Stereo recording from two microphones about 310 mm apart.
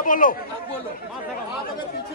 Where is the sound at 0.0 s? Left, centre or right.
Left.